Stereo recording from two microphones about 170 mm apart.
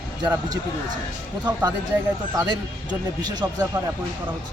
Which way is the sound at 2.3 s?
25° right (ahead or behind).